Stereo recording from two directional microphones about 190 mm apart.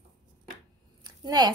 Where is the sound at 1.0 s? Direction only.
20° right (ahead or behind).